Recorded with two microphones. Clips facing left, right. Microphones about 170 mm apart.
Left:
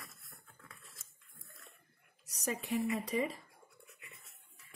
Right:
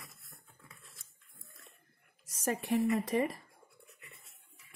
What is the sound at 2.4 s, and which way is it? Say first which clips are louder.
Speech: right 5 dB; 50° right (ahead or behind).